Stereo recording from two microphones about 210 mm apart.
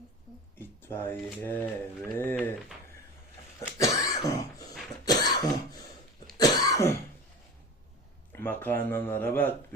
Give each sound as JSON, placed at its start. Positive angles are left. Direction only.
{"t": 0.6, "sound": "speech", "side_deg": 10}
{"t": 3.7, "sound": "cough", "side_deg": 15}
{"t": 8.3, "sound": "speech", "side_deg": 10}